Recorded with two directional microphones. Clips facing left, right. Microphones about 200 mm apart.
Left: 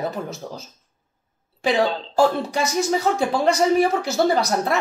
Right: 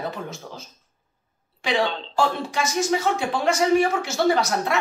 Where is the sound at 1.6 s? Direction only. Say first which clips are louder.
Left 4 dB; 40° left (ahead or behind).